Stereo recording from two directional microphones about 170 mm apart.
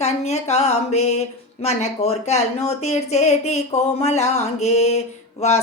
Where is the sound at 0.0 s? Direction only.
40° left (ahead or behind).